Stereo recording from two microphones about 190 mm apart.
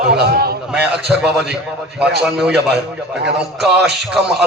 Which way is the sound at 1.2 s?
5° right (ahead or behind).